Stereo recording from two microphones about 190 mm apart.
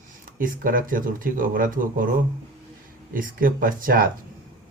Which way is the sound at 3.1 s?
45° right (ahead or behind).